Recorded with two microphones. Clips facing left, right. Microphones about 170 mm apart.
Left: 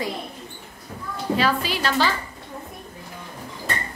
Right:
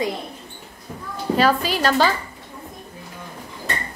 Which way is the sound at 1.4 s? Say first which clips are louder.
Right 6 dB; 45° right (ahead or behind).